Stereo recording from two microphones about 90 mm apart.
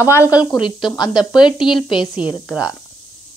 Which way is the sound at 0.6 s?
60° left (ahead or behind).